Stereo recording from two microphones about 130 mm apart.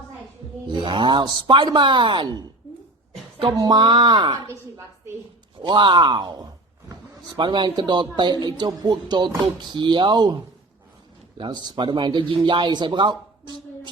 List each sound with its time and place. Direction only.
0.7 s speech: 35° right (ahead or behind)
5.6 s speech: 35° right (ahead or behind)
11.3 s speech: 35° right (ahead or behind)